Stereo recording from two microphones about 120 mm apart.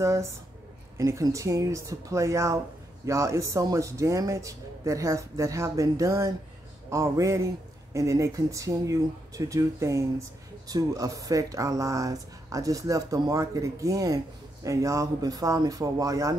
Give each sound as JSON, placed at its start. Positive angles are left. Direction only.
{"t": 0.0, "sound": "speech", "side_deg": -25}